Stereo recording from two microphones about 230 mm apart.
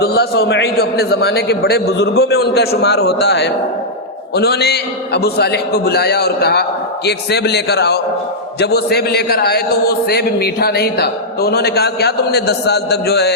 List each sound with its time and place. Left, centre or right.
0.0 s a man's voice: left